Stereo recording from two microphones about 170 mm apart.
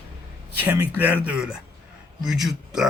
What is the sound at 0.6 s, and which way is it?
Speech, 10° right (ahead or behind).